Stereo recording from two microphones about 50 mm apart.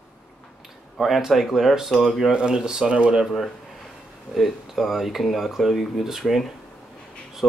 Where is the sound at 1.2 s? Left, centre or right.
Centre.